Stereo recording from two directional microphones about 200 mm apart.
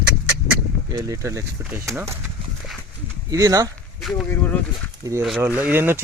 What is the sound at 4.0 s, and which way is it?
Speech, centre (ahead or behind).